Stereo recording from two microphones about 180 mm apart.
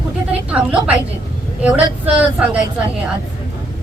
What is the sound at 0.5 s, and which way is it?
A woman's voice, 5° right (ahead or behind).